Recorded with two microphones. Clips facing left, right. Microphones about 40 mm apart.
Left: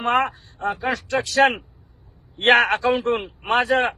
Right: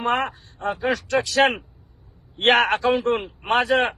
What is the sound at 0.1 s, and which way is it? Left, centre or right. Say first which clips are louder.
Speech: left 4 dB; centre.